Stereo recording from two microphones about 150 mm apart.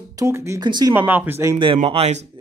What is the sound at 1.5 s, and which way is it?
Speech, 40° right (ahead or behind).